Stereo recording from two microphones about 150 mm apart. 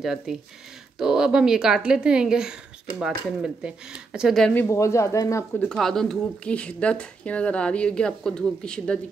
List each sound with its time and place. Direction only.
0.0 s a woman's voice: 5° right (ahead or behind)
4.6 s speech: 20° left (ahead or behind)
5.7 s speech: 5° left (ahead or behind)